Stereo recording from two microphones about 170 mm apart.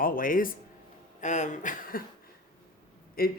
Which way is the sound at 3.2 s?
60° left (ahead or behind).